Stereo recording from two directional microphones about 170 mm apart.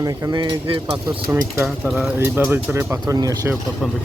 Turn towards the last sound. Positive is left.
turn(degrees=-20)  # may be behind; listen again after turning